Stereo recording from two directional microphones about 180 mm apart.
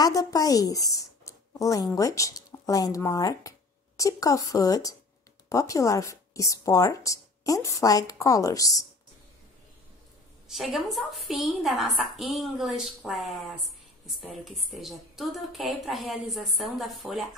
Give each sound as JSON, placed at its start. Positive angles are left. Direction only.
{"t": 0.0, "sound": "speech", "side_deg": 20}
{"t": 10.5, "sound": "a woman's voice", "side_deg": 0}